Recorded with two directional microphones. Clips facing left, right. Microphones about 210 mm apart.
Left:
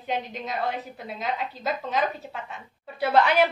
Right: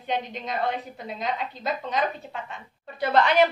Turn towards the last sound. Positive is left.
turn(degrees=5)  # may be behind; listen again after turning